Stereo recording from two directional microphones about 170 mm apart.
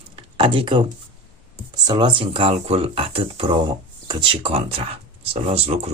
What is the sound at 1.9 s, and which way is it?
Speech, 30° right (ahead or behind).